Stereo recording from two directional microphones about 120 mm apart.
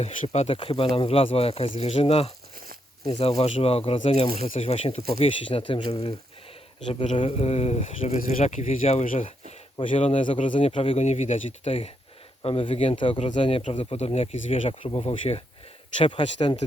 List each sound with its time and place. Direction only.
0.0 s speech: 55° left (ahead or behind)
7.2 s speech: 55° left (ahead or behind)
9.7 s speech: 45° left (ahead or behind)
11.0 s speech: 70° left (ahead or behind)
16.0 s speech: 45° left (ahead or behind)